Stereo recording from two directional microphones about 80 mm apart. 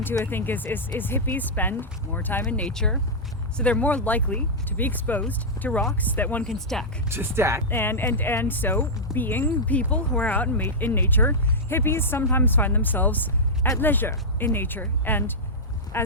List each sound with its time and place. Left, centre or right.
0.3 s speech: left
2.4 s speech: centre
6.5 s speech: centre
7.1 s speech: right
7.7 s speech: left